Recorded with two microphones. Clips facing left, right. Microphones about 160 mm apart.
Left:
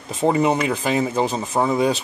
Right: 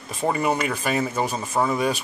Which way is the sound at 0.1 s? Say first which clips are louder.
Left 5 dB; 25° left (ahead or behind).